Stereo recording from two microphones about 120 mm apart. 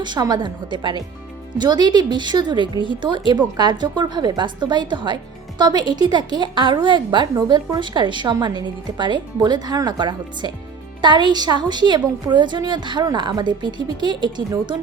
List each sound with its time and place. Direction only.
0.0 s a woman's voice: 35° right (ahead or behind)